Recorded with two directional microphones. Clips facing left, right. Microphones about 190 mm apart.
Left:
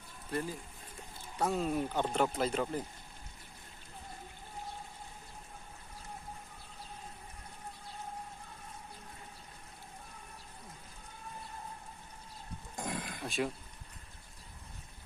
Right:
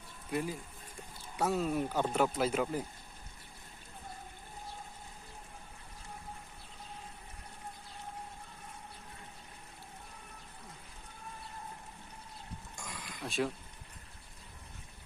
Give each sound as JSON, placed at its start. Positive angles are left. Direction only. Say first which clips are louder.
{"t": 0.3, "sound": "speech", "louder": "right 1 dB", "side_deg": -10}
{"t": 12.7, "sound": "a sound", "louder": "left 11 dB", "side_deg": 50}
{"t": 13.2, "sound": "speech", "louder": "right 1 dB", "side_deg": 0}